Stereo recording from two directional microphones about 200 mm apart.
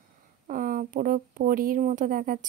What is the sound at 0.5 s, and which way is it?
A woman's voice, 45° right (ahead or behind).